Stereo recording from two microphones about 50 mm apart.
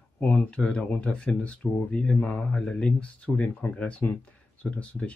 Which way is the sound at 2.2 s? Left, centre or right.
Left.